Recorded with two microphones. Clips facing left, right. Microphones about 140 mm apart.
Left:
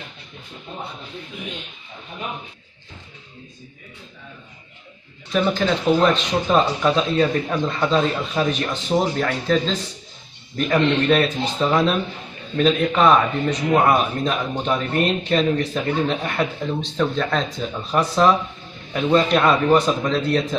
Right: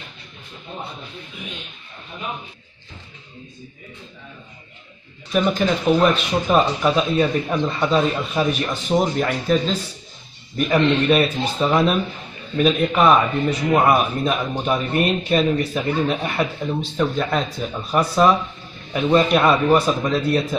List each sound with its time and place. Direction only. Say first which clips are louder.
5.3 s a man's voice: right 1 dB; 15° right (ahead or behind)